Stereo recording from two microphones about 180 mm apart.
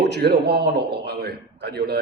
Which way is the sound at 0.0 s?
65° right (ahead or behind).